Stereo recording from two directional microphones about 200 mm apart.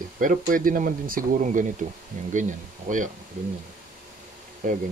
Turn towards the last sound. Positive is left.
turn(degrees=-40)  # may be behind; listen again after turning